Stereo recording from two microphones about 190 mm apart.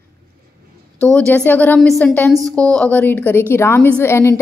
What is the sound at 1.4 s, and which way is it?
A woman's voice, 10° left (ahead or behind).